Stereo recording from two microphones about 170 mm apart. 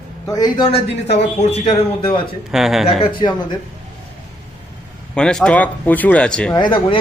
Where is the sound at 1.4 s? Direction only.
40° left (ahead or behind).